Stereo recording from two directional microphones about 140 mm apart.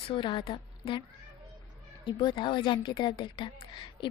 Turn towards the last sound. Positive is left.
turn(degrees=35)  # may be behind; listen again after turning